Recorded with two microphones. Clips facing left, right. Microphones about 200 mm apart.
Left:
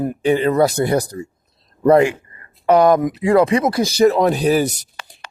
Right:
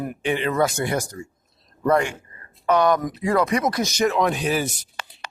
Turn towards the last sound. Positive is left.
turn(degrees=40)  # may be behind; listen again after turning